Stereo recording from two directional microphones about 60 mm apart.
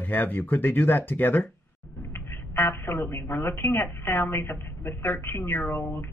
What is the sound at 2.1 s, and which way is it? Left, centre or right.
Speech, left.